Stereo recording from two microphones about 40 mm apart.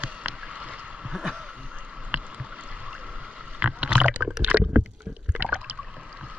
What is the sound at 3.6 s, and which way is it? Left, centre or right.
Rowboat, right.